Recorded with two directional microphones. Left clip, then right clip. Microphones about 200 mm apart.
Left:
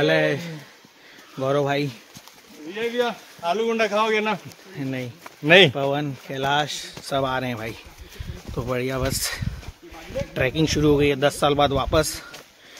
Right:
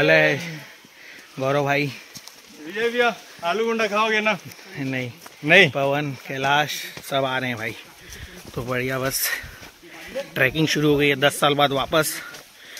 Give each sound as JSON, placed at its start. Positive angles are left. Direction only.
{"t": 0.0, "sound": "speech", "side_deg": -20}
{"t": 1.4, "sound": "speech", "side_deg": -20}
{"t": 3.0, "sound": "speech", "side_deg": -10}
{"t": 4.7, "sound": "speech", "side_deg": -20}
{"t": 5.4, "sound": "speech", "side_deg": 35}
{"t": 5.8, "sound": "speech", "side_deg": -20}
{"t": 7.2, "sound": "speech", "side_deg": 5}